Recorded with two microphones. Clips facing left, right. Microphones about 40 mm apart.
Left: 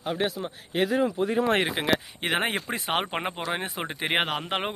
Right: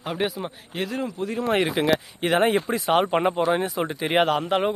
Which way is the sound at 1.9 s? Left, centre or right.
Left.